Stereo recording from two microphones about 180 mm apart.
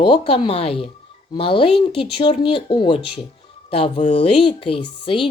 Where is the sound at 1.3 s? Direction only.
30° left (ahead or behind).